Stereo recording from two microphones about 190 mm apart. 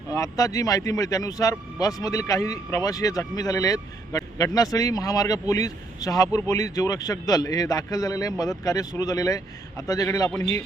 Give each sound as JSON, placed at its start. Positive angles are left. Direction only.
{"t": 0.1, "sound": "speech", "side_deg": 20}